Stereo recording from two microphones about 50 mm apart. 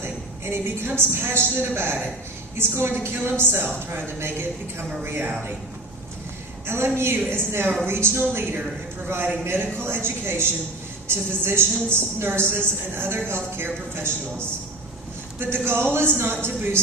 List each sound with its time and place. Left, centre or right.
0.0 s a woman's voice: right
6.7 s a woman's voice: right
15.4 s a woman's voice: right